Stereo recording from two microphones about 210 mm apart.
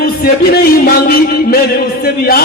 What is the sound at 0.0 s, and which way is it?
A man's voice, 45° left (ahead or behind).